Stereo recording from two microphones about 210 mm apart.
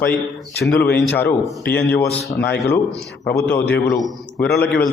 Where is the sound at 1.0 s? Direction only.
5° left (ahead or behind).